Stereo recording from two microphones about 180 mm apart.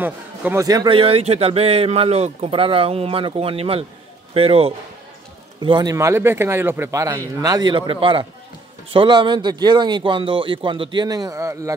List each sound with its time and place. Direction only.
0.0 s a man's voice: 10° right (ahead or behind)